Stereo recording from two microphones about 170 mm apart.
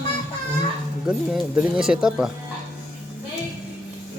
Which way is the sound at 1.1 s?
5° right (ahead or behind).